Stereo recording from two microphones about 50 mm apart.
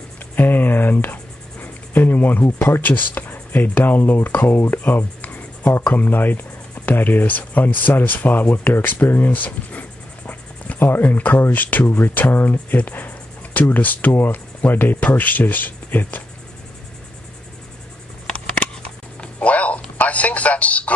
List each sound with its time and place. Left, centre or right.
0.4 s cricket: left
2.8 s speech: left
19.2 s music: left
20.0 s a sound: left